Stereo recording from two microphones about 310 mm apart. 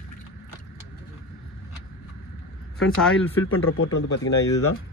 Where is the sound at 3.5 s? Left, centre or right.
Left.